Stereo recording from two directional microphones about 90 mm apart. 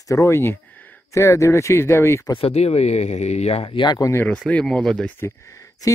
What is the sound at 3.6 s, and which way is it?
Speech, 65° left (ahead or behind).